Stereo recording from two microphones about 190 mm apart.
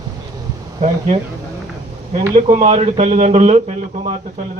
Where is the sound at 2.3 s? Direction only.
35° right (ahead or behind).